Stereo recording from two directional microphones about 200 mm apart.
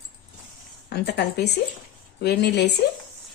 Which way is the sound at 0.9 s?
55° left (ahead or behind).